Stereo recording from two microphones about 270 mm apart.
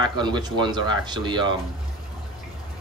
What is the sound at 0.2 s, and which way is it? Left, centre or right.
A man's voice, centre.